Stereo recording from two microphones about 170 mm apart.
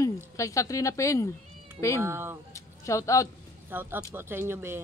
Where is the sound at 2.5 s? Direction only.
20° left (ahead or behind).